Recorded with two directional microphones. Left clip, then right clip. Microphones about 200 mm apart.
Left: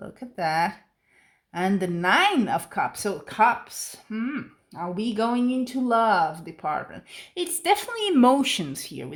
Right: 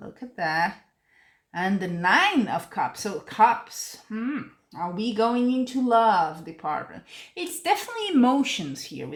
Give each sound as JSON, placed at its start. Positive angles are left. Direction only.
{"t": 0.3, "sound": "speech", "side_deg": 45}